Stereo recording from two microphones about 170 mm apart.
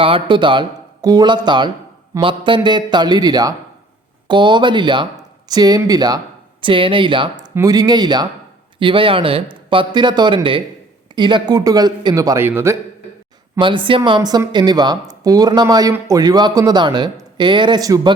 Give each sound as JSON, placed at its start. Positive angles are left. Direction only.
{"t": 0.0, "sound": "speech", "side_deg": -30}
{"t": 13.6, "sound": "speech", "side_deg": -30}